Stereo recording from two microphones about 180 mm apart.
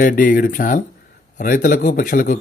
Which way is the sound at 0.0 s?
50° left (ahead or behind).